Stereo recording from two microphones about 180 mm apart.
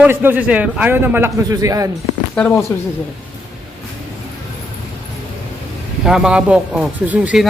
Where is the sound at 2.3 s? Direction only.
10° left (ahead or behind).